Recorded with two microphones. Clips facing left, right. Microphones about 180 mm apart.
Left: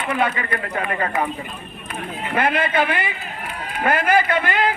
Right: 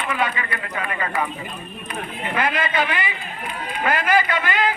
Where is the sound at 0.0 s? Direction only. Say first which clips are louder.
Left 2 dB; 45° left (ahead or behind).